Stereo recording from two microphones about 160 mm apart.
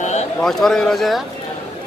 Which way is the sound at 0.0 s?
45° left (ahead or behind).